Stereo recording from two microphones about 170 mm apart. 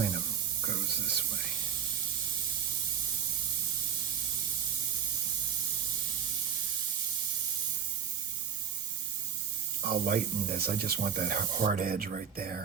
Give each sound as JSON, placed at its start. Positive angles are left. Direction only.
{"t": 0.6, "sound": "spray", "side_deg": -65}
{"t": 9.8, "sound": "speech", "side_deg": -65}